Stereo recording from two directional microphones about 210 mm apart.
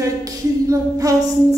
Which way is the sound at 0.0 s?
15° right (ahead or behind).